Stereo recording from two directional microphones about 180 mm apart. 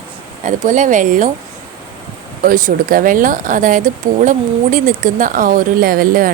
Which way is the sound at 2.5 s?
50° right (ahead or behind).